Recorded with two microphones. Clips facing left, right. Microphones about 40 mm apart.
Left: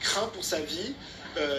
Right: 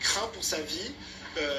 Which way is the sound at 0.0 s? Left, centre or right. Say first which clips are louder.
Left 1 dB; left.